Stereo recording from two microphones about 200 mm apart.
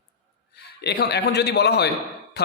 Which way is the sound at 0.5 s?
55° left (ahead or behind).